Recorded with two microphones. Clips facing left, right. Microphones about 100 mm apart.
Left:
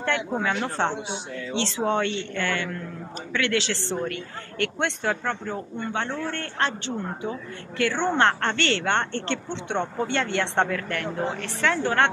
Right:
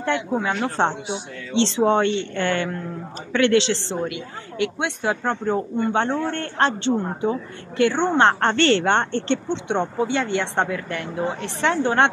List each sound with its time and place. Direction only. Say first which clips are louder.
0.0 s a woman's voice: right 3 dB; 15° right (ahead or behind)
9.7 s speech: right 3 dB; 10° right (ahead or behind)
11.6 s speech: right 3 dB; 20° right (ahead or behind)